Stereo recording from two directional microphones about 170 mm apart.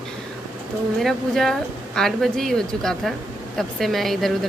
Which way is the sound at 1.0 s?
Centre (ahead or behind).